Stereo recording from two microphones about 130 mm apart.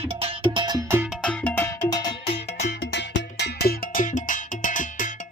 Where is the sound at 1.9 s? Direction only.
30° left (ahead or behind).